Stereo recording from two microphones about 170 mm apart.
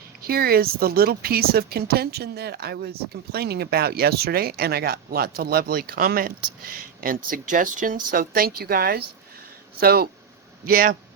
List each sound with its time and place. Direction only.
0.2 s speech: 65° right (ahead or behind)